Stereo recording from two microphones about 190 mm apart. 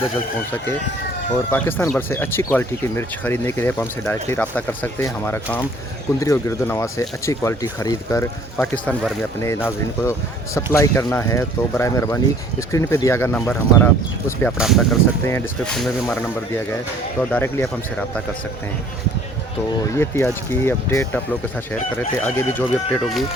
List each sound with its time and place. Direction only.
1.5 s speech: 10° left (ahead or behind)
8.5 s speech: 5° left (ahead or behind)
17.2 s speech: 10° left (ahead or behind)
19.8 s speech: 15° left (ahead or behind)
22.9 s speech: centre (ahead or behind)